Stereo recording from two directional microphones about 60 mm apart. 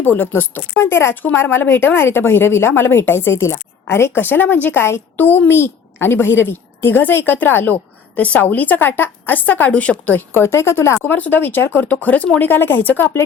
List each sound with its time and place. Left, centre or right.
0.0 s a woman's voice: left
4.2 s a woman's voice: left
4.8 s a woman's voice: left
5.2 s a child's voice: left
5.5 s a woman's voice: left
10.2 s speech: left
11.0 s a woman's voice: left